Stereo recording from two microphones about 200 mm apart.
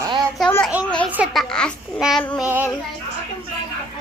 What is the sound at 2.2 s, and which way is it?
Child singing, 10° left (ahead or behind).